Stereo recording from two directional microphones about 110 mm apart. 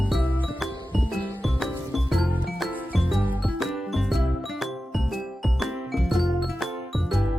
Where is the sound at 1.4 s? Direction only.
Centre (ahead or behind).